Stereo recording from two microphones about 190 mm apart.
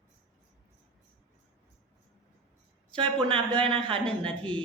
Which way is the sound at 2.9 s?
25° right (ahead or behind).